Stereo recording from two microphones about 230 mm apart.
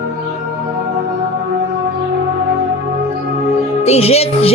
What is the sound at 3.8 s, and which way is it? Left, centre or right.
Speech, left.